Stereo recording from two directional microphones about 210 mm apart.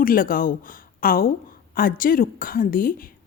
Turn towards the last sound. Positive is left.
turn(degrees=40)  # may be behind; listen again after turning